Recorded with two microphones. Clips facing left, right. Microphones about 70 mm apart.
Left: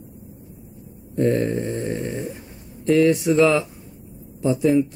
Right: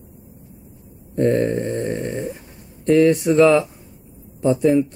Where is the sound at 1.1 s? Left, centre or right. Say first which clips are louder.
Right 2 dB; centre.